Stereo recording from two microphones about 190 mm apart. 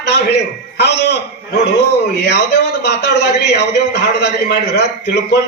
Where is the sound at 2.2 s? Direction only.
60° left (ahead or behind).